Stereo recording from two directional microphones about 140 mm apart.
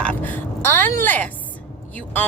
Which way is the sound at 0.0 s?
15° left (ahead or behind).